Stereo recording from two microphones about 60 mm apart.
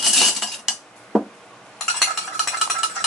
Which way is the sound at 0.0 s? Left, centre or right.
Centre.